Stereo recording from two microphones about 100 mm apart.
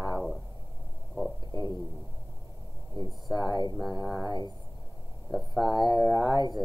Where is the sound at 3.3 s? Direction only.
45° left (ahead or behind).